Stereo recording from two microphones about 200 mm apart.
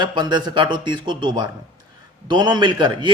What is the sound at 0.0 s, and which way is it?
A man's voice, 25° right (ahead or behind).